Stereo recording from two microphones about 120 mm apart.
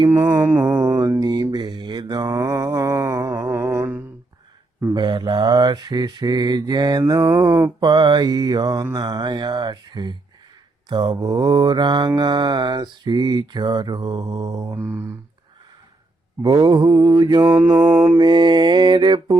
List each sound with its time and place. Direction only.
0.1 s music: 25° right (ahead or behind)
0.8 s mantra: 30° right (ahead or behind)
4.9 s mantra: 40° right (ahead or behind)
14.8 s a sound: 15° right (ahead or behind)
16.4 s mantra: 35° right (ahead or behind)
17.7 s music: 20° right (ahead or behind)
18.2 s mantra: 40° right (ahead or behind)